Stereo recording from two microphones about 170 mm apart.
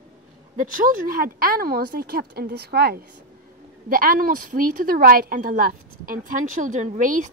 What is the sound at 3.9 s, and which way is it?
A woman's voice, 60° right (ahead or behind).